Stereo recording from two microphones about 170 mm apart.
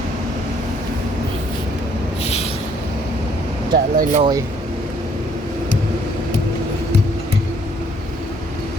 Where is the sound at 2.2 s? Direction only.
40° left (ahead or behind).